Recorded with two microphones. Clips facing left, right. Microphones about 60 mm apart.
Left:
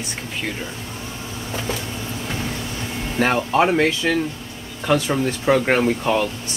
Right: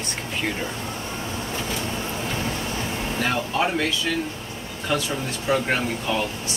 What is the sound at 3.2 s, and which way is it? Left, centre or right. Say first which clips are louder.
Speech: left 7 dB; left.